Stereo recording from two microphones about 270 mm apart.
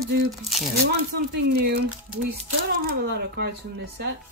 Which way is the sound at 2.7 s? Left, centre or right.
Right.